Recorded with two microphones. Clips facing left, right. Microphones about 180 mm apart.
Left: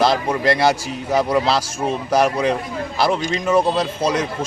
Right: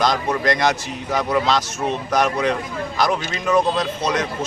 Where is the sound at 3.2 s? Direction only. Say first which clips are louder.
Left 2 dB; 15° left (ahead or behind).